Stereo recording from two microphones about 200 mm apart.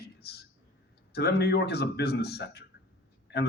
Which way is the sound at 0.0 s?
55° left (ahead or behind).